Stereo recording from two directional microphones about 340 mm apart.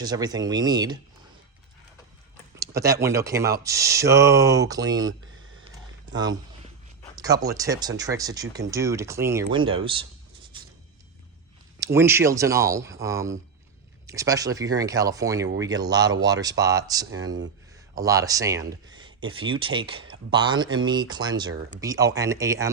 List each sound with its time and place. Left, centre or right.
0.0 s speech: centre
2.6 s speech: centre
7.2 s speech: centre
11.8 s speech: centre